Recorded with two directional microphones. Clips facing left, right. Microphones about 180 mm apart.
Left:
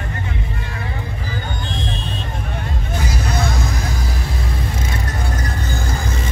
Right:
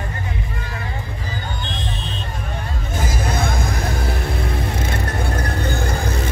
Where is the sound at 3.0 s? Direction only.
50° right (ahead or behind).